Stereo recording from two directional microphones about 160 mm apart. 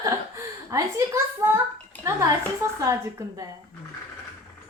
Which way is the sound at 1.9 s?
10° left (ahead or behind).